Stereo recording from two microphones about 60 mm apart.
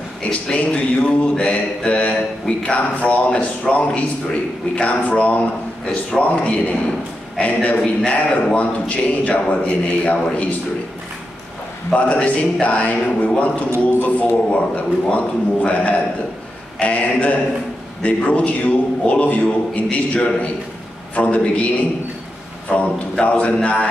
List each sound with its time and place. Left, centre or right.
0.3 s a man's voice: left
11.9 s a man's voice: left
22.7 s a man's voice: left